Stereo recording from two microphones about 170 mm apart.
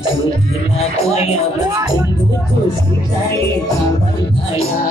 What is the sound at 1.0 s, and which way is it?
Speech, 40° left (ahead or behind).